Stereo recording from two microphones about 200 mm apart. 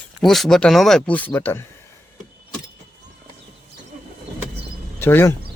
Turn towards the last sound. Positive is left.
turn(degrees=10)  # may be behind; listen again after turning